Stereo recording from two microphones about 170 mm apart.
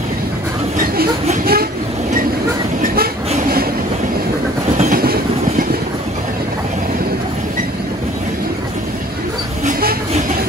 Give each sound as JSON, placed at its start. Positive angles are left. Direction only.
{"t": 1.4, "sound": "train", "side_deg": -60}
{"t": 4.7, "sound": "train", "side_deg": -55}
{"t": 9.7, "sound": "train", "side_deg": -60}